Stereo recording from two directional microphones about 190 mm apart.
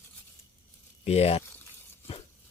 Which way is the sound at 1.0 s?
35° left (ahead or behind).